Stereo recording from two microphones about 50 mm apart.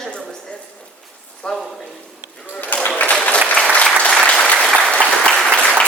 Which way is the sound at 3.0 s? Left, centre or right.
Left.